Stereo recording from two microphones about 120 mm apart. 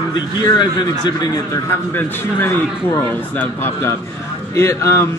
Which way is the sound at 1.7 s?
15° left (ahead or behind).